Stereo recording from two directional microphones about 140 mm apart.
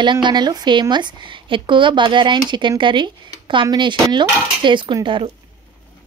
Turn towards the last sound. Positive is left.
turn(degrees=-40)  # may be behind; listen again after turning